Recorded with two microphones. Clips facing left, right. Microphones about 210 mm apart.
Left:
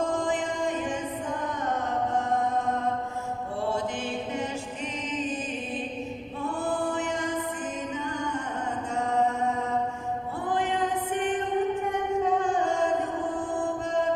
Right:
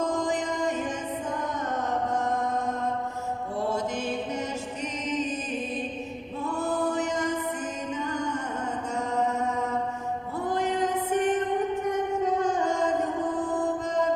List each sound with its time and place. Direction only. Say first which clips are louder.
0.1 s music: even; 40° right (ahead or behind)
3.7 s chant: right 1 dB; 40° right (ahead or behind)
6.8 s music: right 2 dB; 45° right (ahead or behind)
10.5 s music: right 1 dB; 40° right (ahead or behind)
12.2 s a sound: left 1 dB; 40° right (ahead or behind)